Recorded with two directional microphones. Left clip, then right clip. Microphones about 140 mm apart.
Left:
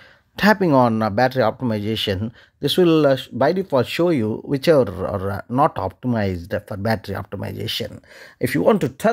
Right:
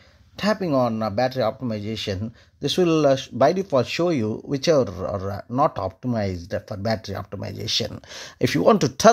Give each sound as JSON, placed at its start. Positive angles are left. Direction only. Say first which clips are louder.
{"t": 0.4, "sound": "speech", "louder": "left 6 dB", "side_deg": 45}
{"t": 7.9, "sound": "speech", "louder": "right 4 dB", "side_deg": -5}